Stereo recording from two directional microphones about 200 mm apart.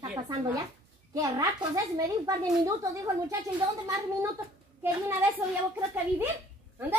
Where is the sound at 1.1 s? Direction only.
15° right (ahead or behind).